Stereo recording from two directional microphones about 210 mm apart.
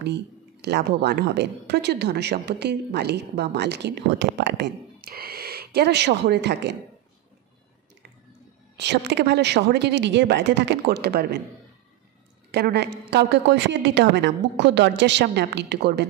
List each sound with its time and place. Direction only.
0.0 s a woman's voice: 55° right (ahead or behind)
8.7 s a woman's voice: 55° right (ahead or behind)
12.4 s a woman's voice: 50° right (ahead or behind)